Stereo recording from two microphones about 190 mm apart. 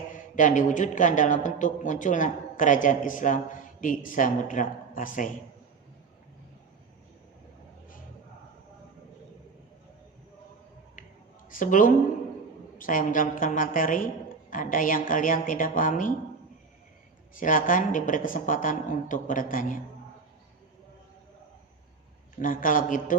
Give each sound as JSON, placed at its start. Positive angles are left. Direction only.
{"t": 0.3, "sound": "a man's voice", "side_deg": 45}
{"t": 11.4, "sound": "a man's voice", "side_deg": 45}
{"t": 17.3, "sound": "a man's voice", "side_deg": 45}
{"t": 22.4, "sound": "a man's voice", "side_deg": 45}